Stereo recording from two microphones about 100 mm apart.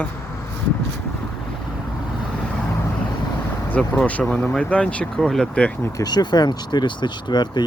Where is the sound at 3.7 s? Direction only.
10° left (ahead or behind).